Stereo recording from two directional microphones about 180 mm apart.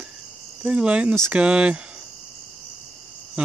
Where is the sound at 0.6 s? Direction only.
5° right (ahead or behind).